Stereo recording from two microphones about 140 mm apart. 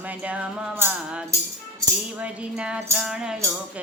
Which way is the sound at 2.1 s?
5° right (ahead or behind).